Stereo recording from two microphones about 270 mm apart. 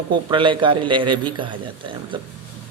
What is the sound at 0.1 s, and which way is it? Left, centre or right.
Speech, centre.